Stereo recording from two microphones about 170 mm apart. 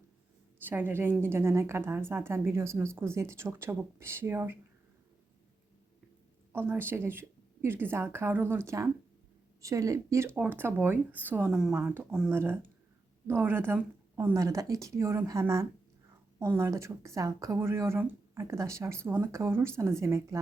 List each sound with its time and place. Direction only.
0.6 s a woman's voice: 10° right (ahead or behind)
6.5 s a woman's voice: 10° right (ahead or behind)